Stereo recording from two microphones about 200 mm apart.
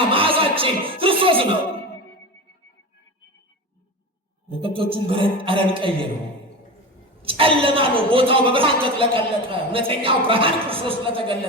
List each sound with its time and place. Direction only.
0.1 s music: 25° right (ahead or behind)
4.6 s speech: 25° right (ahead or behind)
7.2 s speech: 25° right (ahead or behind)